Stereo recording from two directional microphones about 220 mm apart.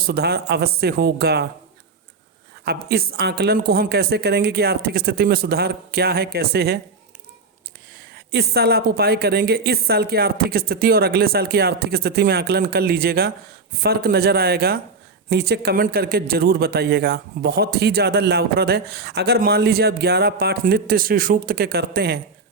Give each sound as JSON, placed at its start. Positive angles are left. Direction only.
{"t": 0.0, "sound": "speech", "side_deg": -45}
{"t": 2.6, "sound": "speech", "side_deg": -45}
{"t": 8.1, "sound": "speech", "side_deg": -50}